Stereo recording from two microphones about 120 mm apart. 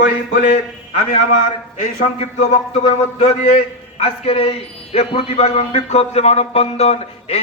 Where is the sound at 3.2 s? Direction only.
60° left (ahead or behind).